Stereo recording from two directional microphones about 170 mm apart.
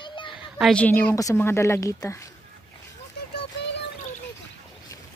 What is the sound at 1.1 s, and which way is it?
Speech, 15° left (ahead or behind).